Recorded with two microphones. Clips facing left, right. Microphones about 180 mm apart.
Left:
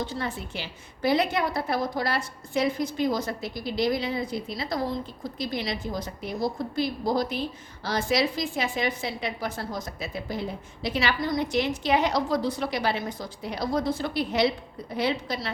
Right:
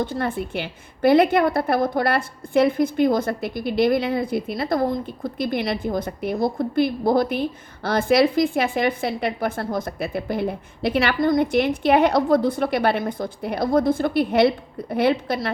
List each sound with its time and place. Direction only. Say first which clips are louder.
0.0 s a woman's voice: right 7 dB; 55° right (ahead or behind)